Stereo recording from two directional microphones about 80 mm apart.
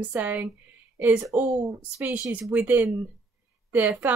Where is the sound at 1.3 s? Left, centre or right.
Right.